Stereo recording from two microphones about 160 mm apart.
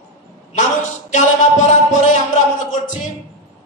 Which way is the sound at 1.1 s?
50° left (ahead or behind).